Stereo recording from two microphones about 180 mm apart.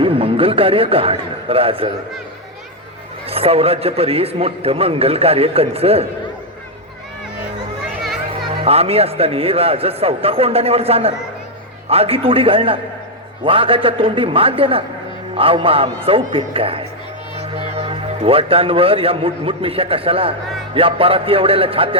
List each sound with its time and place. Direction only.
0.0 s a man's voice: 30° right (ahead or behind)
3.2 s a man's voice: 30° right (ahead or behind)
8.6 s a man's voice: 35° right (ahead or behind)